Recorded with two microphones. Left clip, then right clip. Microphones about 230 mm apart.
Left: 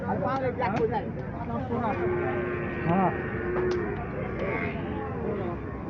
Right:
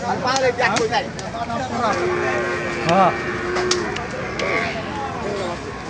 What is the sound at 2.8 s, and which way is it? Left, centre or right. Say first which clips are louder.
Speech: right 11 dB; right.